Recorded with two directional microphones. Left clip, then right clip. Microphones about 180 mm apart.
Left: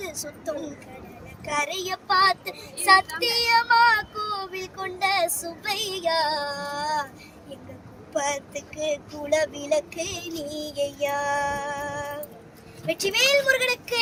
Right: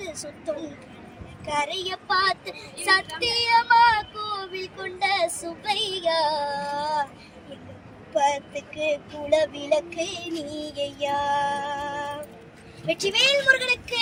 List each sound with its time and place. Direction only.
0.0 s a sound: 10° left (ahead or behind)
1.5 s child singing: 10° left (ahead or behind)
8.1 s child singing: 15° left (ahead or behind)